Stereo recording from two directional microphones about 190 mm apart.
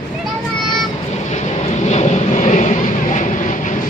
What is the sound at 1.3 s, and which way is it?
Vehicle, 35° left (ahead or behind).